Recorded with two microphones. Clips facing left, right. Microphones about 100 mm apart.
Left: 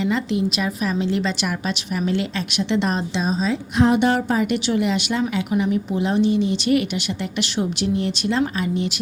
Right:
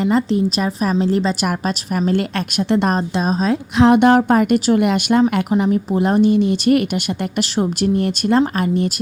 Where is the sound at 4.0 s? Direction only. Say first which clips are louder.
Right 6 dB; 50° right (ahead or behind).